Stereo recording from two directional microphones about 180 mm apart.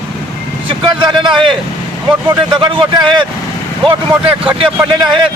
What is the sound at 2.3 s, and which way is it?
Speech, 25° right (ahead or behind).